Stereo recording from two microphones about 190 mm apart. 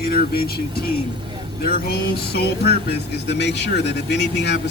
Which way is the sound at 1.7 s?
55° left (ahead or behind).